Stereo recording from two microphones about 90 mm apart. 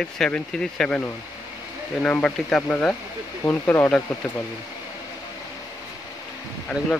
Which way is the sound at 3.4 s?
25° left (ahead or behind).